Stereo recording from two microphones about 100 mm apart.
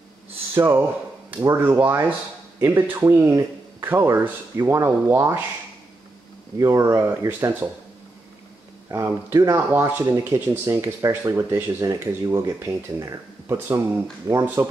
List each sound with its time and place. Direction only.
0.6 s a man's voice: 25° right (ahead or behind)
6.6 s speech: 30° right (ahead or behind)
8.9 s speech: 30° right (ahead or behind)
14.4 s speech: 20° right (ahead or behind)